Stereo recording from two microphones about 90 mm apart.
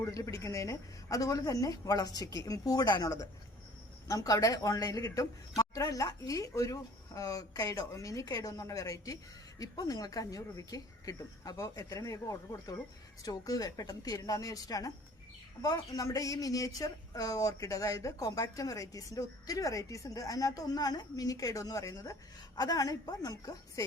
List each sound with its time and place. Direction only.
0.0 s a woman's voice: 40° left (ahead or behind)